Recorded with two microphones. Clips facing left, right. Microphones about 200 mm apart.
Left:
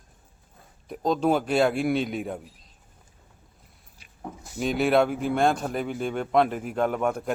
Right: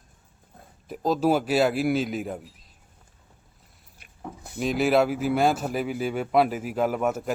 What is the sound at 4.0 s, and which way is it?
Pig, 60° right (ahead or behind).